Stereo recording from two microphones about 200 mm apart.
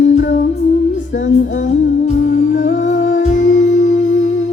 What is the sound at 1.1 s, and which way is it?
Music, 65° left (ahead or behind).